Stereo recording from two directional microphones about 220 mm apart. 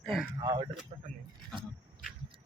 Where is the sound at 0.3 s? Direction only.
20° right (ahead or behind).